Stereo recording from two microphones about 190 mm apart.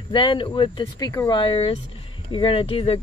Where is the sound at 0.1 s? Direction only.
25° left (ahead or behind).